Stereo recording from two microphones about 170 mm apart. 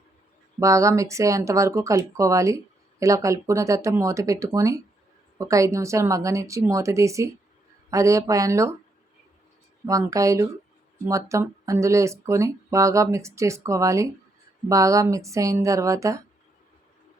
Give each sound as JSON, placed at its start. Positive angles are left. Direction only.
{"t": 0.6, "sound": "speech", "side_deg": -20}
{"t": 9.8, "sound": "speech", "side_deg": -20}